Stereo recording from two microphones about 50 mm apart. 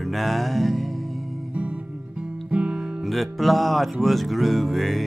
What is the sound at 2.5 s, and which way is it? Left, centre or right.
Music, right.